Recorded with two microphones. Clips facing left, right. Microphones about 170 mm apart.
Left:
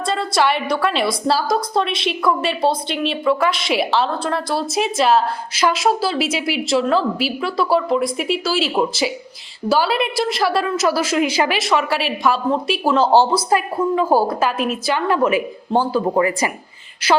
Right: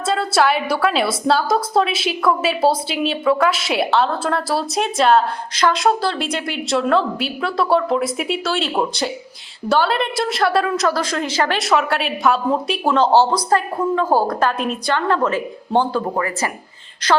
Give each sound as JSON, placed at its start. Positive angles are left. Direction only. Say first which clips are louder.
{"t": 0.0, "sound": "a woman's voice", "louder": "right 1 dB", "side_deg": 0}
{"t": 13.1, "sound": "a woman's voice", "louder": "left 1 dB", "side_deg": 10}
{"t": 16.1, "sound": "speech", "louder": "left 4 dB", "side_deg": 20}
{"t": 17.0, "sound": "a woman's voice", "louder": "left 1 dB", "side_deg": 5}